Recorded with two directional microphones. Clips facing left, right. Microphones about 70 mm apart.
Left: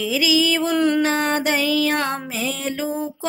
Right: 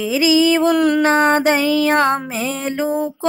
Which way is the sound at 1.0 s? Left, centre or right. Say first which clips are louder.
Right 6 dB; right.